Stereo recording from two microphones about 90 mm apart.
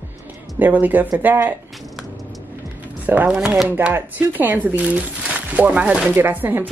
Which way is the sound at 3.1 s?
15° right (ahead or behind).